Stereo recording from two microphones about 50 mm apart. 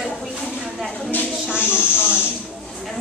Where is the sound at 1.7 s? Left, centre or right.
Right.